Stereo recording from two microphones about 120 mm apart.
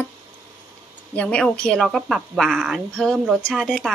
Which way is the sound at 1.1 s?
10° left (ahead or behind).